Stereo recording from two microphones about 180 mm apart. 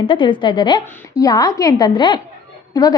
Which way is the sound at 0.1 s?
25° left (ahead or behind).